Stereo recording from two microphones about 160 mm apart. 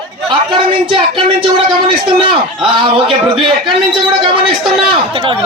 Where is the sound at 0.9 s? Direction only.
35° right (ahead or behind).